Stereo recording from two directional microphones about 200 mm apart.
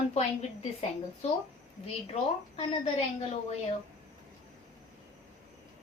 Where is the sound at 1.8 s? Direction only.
30° left (ahead or behind).